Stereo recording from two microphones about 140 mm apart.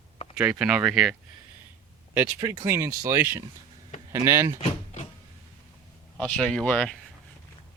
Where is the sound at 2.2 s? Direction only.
15° right (ahead or behind).